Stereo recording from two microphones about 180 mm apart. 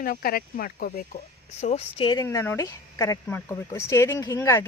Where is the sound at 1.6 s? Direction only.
35° left (ahead or behind).